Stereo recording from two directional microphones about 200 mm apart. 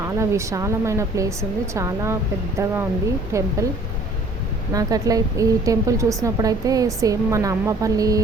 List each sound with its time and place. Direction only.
0.2 s a woman's voice: 15° right (ahead or behind)
4.7 s a woman's voice: 15° right (ahead or behind)